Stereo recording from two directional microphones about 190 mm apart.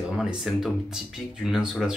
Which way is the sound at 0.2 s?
Centre (ahead or behind).